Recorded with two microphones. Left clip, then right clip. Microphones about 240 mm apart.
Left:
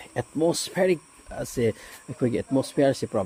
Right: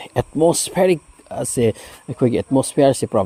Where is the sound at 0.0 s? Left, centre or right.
Right.